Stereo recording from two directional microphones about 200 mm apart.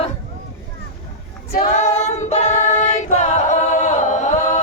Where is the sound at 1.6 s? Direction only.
35° left (ahead or behind).